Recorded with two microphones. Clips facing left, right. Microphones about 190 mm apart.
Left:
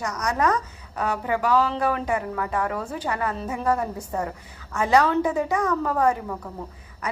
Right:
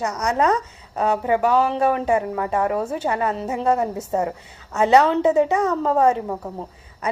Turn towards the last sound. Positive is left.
turn(degrees=-25)  # may be behind; listen again after turning